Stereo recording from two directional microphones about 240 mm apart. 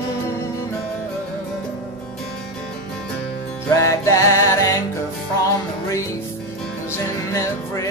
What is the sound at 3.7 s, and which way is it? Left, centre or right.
Music, centre.